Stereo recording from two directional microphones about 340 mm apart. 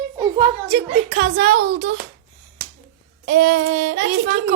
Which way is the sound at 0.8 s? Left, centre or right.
Right.